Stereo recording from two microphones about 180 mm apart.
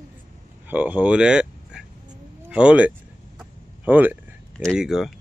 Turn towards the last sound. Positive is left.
turn(degrees=0)  # may be behind; listen again after turning